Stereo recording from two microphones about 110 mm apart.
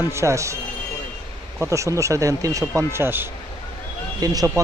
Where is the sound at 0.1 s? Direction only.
25° right (ahead or behind).